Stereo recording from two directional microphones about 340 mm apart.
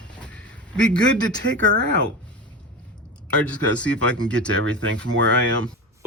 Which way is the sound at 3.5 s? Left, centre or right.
Centre.